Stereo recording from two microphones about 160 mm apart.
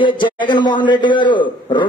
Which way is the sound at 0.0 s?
30° left (ahead or behind).